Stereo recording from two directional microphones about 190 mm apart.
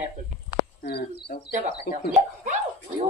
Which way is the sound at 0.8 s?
60° left (ahead or behind).